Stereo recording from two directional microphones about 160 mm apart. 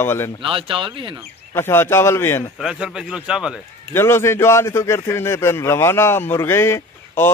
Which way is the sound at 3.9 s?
15° left (ahead or behind).